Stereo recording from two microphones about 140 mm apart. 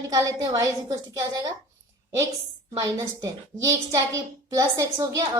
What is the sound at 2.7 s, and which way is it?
A child's voice, 20° right (ahead or behind).